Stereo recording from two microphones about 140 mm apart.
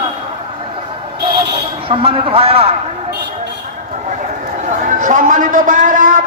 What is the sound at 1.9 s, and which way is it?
Speech, 40° right (ahead or behind).